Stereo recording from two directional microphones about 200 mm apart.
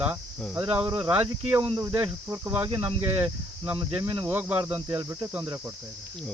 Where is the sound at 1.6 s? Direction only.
20° right (ahead or behind).